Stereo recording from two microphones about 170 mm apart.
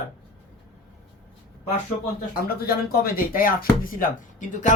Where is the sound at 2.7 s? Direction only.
60° left (ahead or behind).